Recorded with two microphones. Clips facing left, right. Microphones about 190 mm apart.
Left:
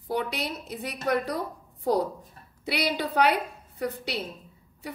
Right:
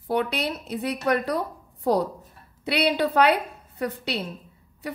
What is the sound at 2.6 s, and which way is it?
Speech, 65° right (ahead or behind).